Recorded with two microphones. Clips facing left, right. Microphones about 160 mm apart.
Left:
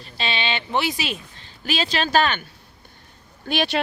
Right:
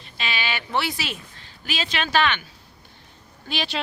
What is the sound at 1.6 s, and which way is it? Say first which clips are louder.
Speech: left 4 dB; 35° left (ahead or behind).